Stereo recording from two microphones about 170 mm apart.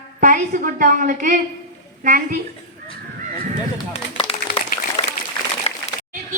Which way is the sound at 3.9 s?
35° left (ahead or behind).